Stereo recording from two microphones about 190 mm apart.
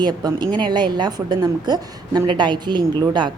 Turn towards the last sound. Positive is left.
turn(degrees=-25)  # may be behind; listen again after turning